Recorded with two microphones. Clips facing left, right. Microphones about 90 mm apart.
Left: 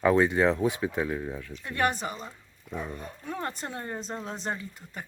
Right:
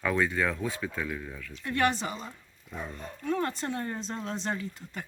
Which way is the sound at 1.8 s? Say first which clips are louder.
Even; 45° left (ahead or behind).